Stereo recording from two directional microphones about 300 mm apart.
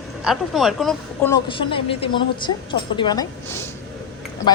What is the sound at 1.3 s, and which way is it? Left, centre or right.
A woman's voice, centre.